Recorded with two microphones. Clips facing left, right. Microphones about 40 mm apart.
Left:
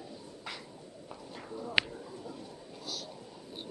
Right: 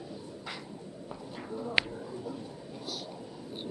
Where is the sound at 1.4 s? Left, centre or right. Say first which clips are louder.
Right 4 dB; centre.